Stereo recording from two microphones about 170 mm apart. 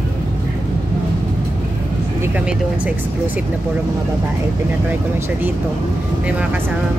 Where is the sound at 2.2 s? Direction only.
10° right (ahead or behind).